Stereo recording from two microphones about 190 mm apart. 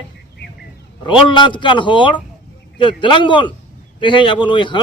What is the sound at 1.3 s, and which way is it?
Speech, 25° left (ahead or behind).